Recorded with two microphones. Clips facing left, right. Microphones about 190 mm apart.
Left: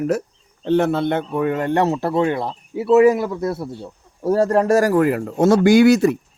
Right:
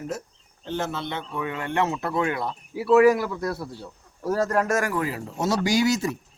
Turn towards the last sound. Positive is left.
turn(degrees=60)  # may be behind; listen again after turning